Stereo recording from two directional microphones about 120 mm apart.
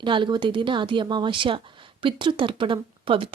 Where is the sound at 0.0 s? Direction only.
40° right (ahead or behind).